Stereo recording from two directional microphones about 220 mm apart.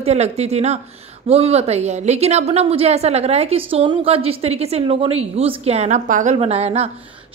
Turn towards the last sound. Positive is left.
turn(degrees=-30)  # may be behind; listen again after turning